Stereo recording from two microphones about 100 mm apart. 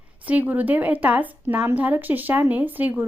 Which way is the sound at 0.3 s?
15° right (ahead or behind).